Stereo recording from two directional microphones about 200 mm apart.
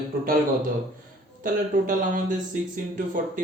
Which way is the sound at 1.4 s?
40° right (ahead or behind).